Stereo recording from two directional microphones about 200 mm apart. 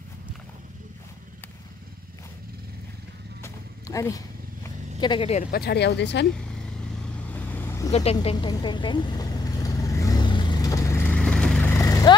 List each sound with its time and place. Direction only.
3.4 s horse: 15° left (ahead or behind)
5.0 s speech: 25° left (ahead or behind)
5.5 s speech: 55° left (ahead or behind)
7.2 s vehicle: 10° left (ahead or behind)
7.9 s vehicle: 30° left (ahead or behind); by 11.7 s 5° left (ahead or behind)
11.7 s vehicle: 15° left (ahead or behind)